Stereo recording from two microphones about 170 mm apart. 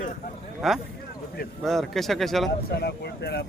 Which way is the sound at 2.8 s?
70° left (ahead or behind).